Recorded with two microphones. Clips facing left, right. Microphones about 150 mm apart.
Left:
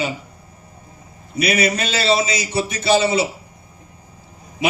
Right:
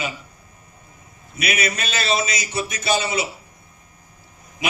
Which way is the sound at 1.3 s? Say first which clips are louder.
Left 6 dB; 30° left (ahead or behind).